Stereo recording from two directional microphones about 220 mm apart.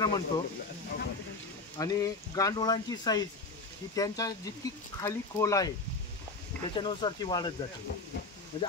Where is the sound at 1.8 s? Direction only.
15° left (ahead or behind).